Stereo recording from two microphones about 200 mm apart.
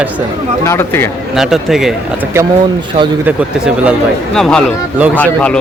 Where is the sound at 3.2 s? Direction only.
5° right (ahead or behind).